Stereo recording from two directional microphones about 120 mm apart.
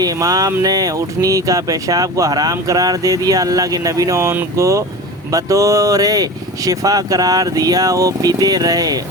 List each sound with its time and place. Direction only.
0.0 s speech: 30° right (ahead or behind)